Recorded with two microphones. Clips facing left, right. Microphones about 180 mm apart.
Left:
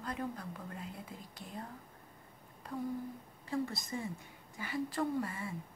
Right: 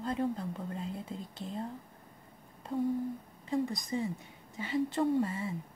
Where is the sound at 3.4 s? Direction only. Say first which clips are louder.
Right 4 dB; 15° right (ahead or behind).